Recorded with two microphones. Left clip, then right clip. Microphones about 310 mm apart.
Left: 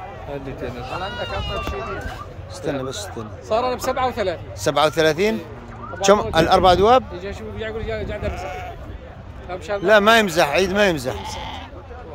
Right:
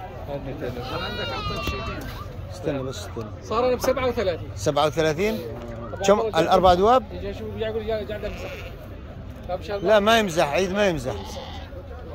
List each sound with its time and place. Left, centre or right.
1.0 s a man's voice: centre